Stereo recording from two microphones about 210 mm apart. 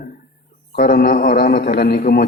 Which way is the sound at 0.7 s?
50° left (ahead or behind).